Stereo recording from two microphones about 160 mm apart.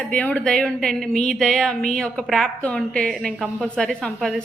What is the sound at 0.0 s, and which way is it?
A woman's voice, 10° left (ahead or behind).